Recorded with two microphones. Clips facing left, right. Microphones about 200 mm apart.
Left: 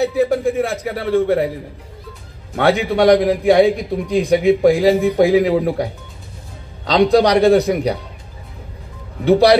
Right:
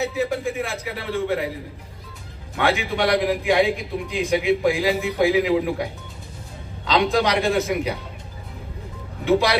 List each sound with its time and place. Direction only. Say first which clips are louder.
0.0 s a man's voice: left 8 dB; 40° left (ahead or behind)
2.5 s a man's voice: left 7 dB; 40° left (ahead or behind)
9.2 s a man's voice: left 8 dB; 40° left (ahead or behind)